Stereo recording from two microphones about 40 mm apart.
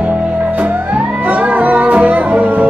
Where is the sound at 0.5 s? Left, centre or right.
Right.